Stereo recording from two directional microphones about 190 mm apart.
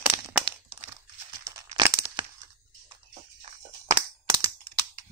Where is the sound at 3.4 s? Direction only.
25° right (ahead or behind).